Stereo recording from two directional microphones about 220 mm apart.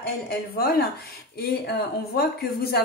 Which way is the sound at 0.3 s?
45° left (ahead or behind).